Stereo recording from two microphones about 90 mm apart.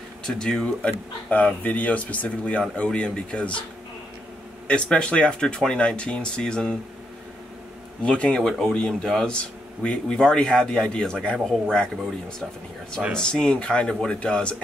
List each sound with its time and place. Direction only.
0.2 s speech: 10° left (ahead or behind)
4.6 s speech: 10° left (ahead or behind)
8.0 s speech: 10° left (ahead or behind)